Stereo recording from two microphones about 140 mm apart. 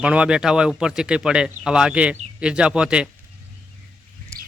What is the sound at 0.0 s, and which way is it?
A man's voice, 10° right (ahead or behind).